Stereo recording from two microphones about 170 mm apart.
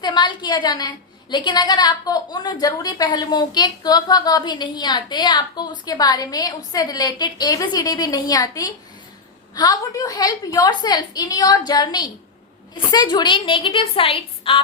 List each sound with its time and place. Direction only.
0.0 s a woman's voice: 25° left (ahead or behind)